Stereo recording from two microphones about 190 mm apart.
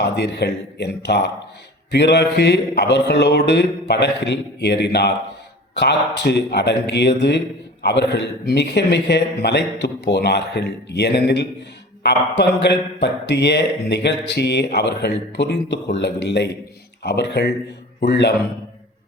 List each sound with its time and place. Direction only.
0.0 s a man's voice: 60° left (ahead or behind)